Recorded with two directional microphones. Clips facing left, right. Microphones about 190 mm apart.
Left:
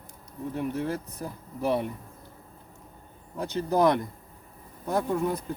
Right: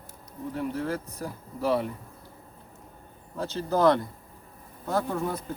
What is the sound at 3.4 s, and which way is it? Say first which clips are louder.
Speech: even; 15° left (ahead or behind).